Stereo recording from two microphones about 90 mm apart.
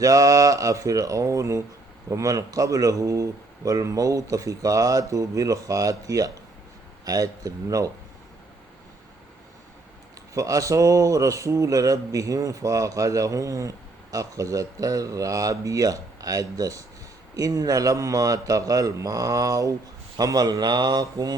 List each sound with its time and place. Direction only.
0.0 s a man's voice: 40° right (ahead or behind)
10.3 s a man's voice: 40° right (ahead or behind)